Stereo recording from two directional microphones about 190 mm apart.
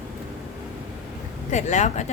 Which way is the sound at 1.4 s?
40° left (ahead or behind).